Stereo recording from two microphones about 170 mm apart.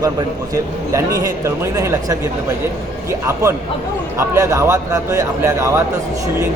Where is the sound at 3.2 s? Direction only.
15° right (ahead or behind).